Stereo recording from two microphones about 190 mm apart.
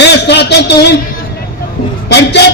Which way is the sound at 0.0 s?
65° left (ahead or behind).